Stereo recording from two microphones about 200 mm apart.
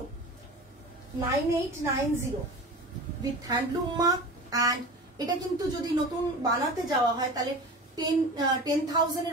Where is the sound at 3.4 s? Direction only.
20° right (ahead or behind).